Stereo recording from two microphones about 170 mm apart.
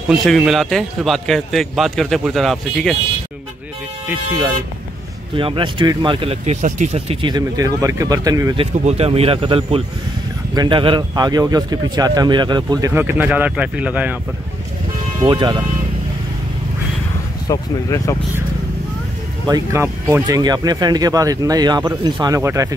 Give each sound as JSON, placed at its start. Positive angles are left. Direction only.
{"t": 0.1, "sound": "a man's voice", "side_deg": 0}
{"t": 4.1, "sound": "speech", "side_deg": -15}
{"t": 5.3, "sound": "speech", "side_deg": -30}
{"t": 8.5, "sound": "speech", "side_deg": -35}
{"t": 15.2, "sound": "speech", "side_deg": -25}
{"t": 17.5, "sound": "speech", "side_deg": 20}
{"t": 19.4, "sound": "speech", "side_deg": -20}